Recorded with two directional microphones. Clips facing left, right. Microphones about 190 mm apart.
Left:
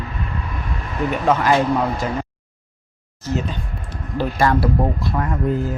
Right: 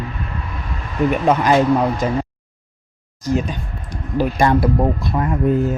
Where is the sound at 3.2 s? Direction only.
15° right (ahead or behind).